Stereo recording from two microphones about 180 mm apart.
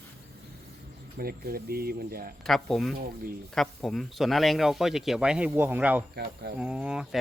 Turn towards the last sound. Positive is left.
turn(degrees=-5)  # may be behind; listen again after turning